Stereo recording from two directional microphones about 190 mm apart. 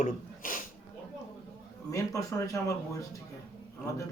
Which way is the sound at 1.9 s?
15° left (ahead or behind).